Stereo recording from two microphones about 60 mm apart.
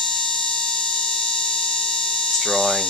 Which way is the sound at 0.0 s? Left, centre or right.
Centre.